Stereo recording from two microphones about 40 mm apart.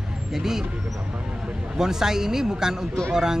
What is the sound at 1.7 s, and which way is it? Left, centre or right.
Speech, centre.